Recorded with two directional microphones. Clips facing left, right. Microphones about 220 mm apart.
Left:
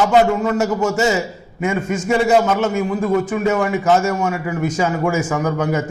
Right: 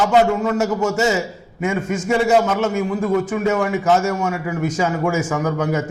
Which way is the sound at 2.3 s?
25° left (ahead or behind).